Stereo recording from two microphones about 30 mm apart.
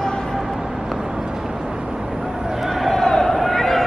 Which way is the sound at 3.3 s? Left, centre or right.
Centre.